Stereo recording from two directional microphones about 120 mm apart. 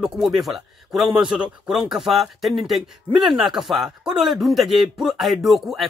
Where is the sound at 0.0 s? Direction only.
Centre (ahead or behind).